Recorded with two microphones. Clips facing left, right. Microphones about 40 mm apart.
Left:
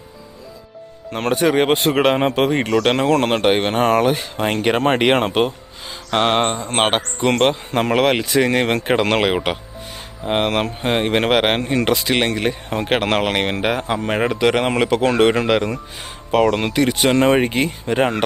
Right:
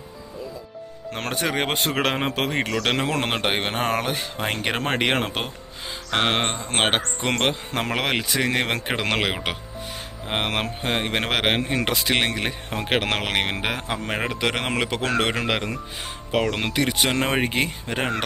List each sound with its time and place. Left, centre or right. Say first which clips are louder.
1.1 s speech: left 9 dB; centre
3.1 s speech: left 8 dB; centre
6.1 s speech: left 5 dB; centre
10.8 s speech: left 7 dB; centre
11.3 s speech: left 6 dB; centre